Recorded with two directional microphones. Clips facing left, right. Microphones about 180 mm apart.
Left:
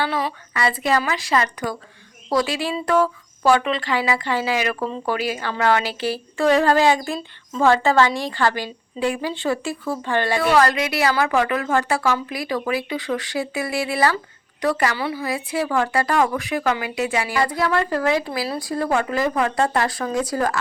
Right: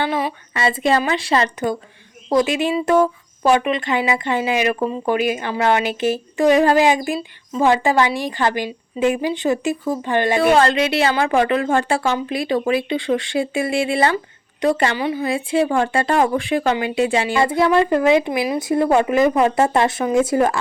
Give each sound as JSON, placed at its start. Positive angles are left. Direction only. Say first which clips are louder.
{"t": 0.0, "sound": "speech", "louder": "right 2 dB", "side_deg": -15}